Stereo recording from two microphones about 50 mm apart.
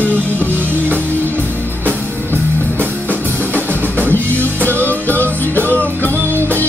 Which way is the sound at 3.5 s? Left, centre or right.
Left.